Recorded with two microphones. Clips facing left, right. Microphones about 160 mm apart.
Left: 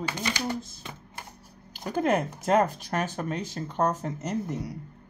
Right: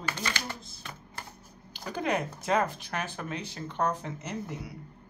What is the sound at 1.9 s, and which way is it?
Speech, 45° left (ahead or behind).